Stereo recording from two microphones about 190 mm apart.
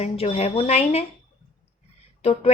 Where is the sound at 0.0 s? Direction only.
30° left (ahead or behind).